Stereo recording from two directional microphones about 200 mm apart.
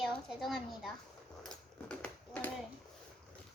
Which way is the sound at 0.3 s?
Centre (ahead or behind).